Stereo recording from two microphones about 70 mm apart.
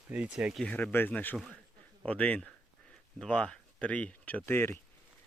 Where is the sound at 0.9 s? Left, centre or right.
Left.